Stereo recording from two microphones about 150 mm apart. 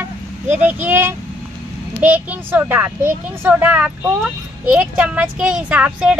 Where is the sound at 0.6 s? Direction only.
15° right (ahead or behind).